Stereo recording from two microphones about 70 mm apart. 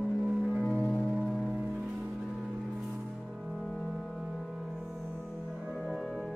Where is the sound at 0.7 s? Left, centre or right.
Left.